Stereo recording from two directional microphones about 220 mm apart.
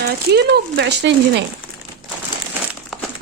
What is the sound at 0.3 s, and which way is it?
Speech, 50° right (ahead or behind).